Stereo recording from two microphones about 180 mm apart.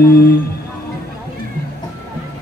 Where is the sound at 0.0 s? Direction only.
55° left (ahead or behind).